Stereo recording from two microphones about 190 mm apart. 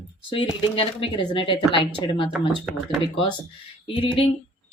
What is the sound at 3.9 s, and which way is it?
Speech, 25° left (ahead or behind).